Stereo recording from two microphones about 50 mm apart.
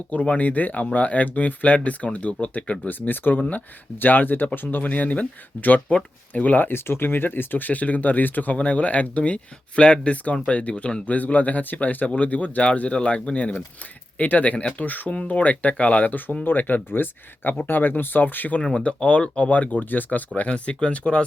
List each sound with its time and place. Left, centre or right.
0.1 s speech: left
2.9 s speech: left
16.1 s speech: left
18.8 s speech: left